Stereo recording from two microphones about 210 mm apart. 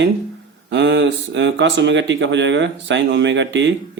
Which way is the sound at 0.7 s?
55° right (ahead or behind).